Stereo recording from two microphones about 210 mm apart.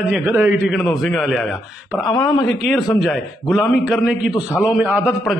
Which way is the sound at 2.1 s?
20° left (ahead or behind).